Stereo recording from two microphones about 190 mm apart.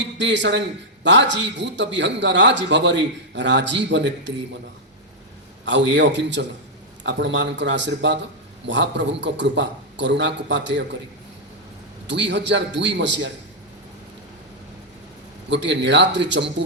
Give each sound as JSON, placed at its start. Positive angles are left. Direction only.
{"t": 0.0, "sound": "a man's voice", "side_deg": -70}
{"t": 5.6, "sound": "a man's voice", "side_deg": -70}
{"t": 12.0, "sound": "a man's voice", "side_deg": -70}
{"t": 15.4, "sound": "a man's voice", "side_deg": -70}